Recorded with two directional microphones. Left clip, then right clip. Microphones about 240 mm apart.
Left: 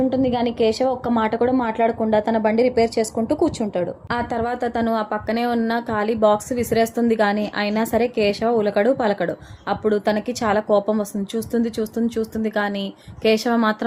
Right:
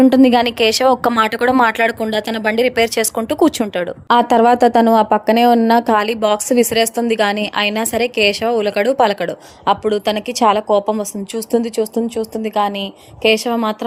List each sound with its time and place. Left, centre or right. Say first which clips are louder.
0.0 s a woman's voice: right 9 dB; right